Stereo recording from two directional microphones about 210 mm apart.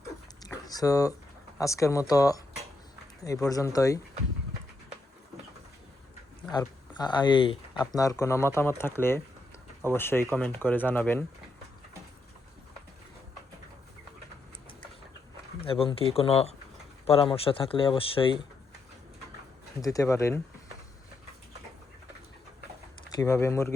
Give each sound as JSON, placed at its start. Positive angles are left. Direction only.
{"t": 0.4, "sound": "a sound", "side_deg": 15}
{"t": 1.5, "sound": "speech", "side_deg": 15}
{"t": 6.5, "sound": "speech", "side_deg": 20}
{"t": 15.6, "sound": "speech", "side_deg": 25}
{"t": 19.8, "sound": "speech", "side_deg": 15}
{"t": 23.0, "sound": "speech", "side_deg": 15}